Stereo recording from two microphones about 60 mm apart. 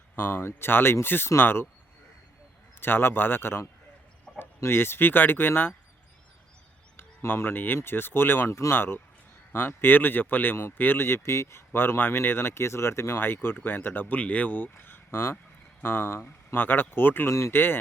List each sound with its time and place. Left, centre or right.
0.2 s speech: left
2.8 s speech: left
6.9 s speech: left
17.2 s speech: left
17.5 s speech: left